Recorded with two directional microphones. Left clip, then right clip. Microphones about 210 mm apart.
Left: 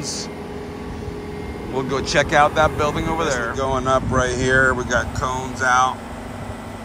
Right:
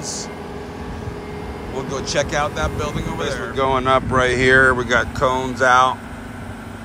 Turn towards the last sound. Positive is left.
turn(degrees=10)  # may be behind; listen again after turning